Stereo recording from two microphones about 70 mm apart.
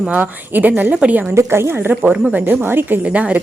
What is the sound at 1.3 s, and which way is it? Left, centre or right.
Speech, right.